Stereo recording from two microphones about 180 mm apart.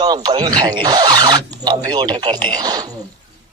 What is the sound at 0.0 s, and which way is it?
Speech, 25° right (ahead or behind).